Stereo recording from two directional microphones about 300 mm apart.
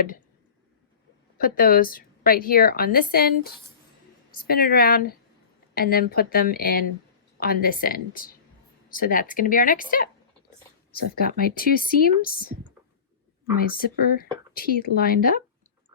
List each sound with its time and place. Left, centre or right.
1.4 s a woman's voice: left
13.6 s a woman's voice: left